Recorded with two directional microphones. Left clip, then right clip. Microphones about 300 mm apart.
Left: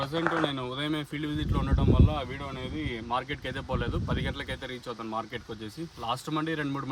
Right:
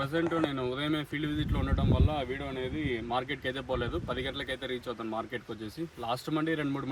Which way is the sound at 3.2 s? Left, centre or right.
Centre.